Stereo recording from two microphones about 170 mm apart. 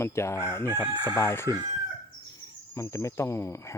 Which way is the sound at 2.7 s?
15° left (ahead or behind).